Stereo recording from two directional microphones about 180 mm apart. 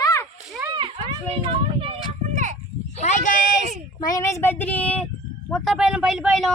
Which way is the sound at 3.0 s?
40° left (ahead or behind).